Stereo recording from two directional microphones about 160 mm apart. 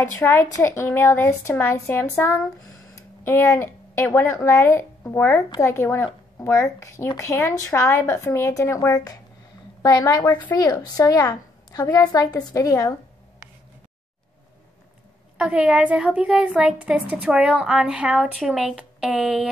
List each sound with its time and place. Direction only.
0.0 s a woman's voice: 15° left (ahead or behind)
15.3 s a woman's voice: 5° right (ahead or behind)